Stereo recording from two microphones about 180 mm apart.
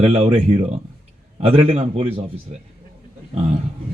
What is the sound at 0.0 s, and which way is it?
Speech, 35° right (ahead or behind).